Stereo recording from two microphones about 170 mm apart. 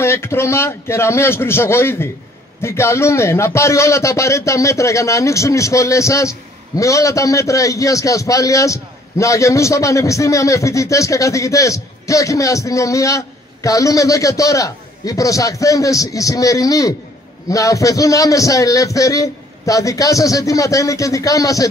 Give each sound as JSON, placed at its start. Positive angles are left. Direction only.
{"t": 0.0, "sound": "a man's voice", "side_deg": 15}